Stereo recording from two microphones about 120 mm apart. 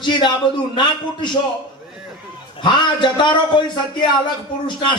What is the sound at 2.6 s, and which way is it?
Speech, 40° left (ahead or behind).